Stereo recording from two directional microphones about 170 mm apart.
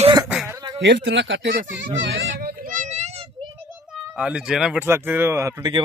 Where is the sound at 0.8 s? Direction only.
90° right; by 3.5 s 30° right (ahead or behind).